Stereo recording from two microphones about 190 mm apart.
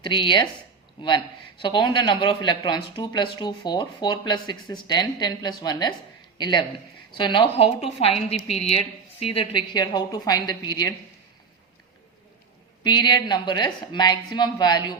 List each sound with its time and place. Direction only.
0.0 s speech: 25° left (ahead or behind)
1.6 s a woman's voice: 25° left (ahead or behind)
12.8 s speech: 25° left (ahead or behind)